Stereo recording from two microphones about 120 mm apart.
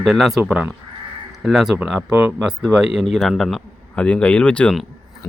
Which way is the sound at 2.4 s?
5° right (ahead or behind).